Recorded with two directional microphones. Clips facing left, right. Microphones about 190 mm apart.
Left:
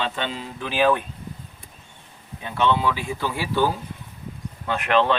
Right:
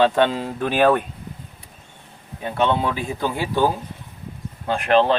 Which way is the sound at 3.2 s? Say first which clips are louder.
Right 2 dB; 20° right (ahead or behind).